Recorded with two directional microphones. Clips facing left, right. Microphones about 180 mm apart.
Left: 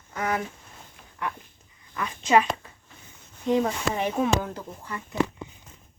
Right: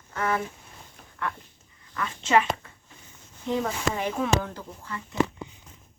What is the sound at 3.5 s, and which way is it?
Speech, 20° left (ahead or behind).